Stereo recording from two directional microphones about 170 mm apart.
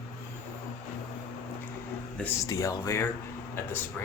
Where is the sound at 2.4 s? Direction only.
20° left (ahead or behind).